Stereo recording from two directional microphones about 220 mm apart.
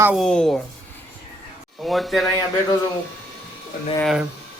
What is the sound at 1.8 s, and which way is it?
Speech, centre (ahead or behind).